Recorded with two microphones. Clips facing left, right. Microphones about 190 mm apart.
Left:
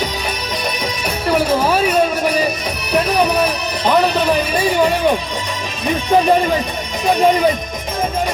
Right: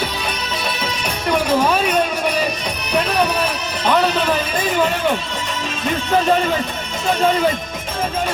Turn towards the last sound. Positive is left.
turn(degrees=15)  # may be behind; listen again after turning